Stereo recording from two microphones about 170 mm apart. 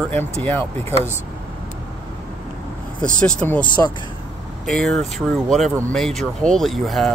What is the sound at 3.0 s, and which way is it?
Speech, 5° left (ahead or behind).